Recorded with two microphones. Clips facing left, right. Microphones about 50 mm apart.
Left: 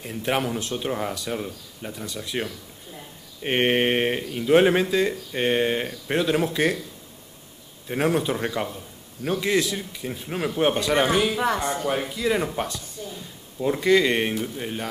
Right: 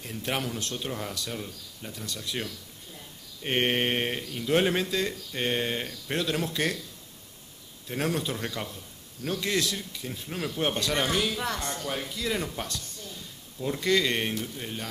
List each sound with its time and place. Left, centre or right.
0.0 s a man's voice: centre
7.9 s a man's voice: centre